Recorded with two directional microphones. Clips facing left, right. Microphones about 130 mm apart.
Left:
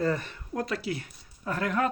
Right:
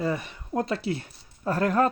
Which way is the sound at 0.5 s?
25° right (ahead or behind).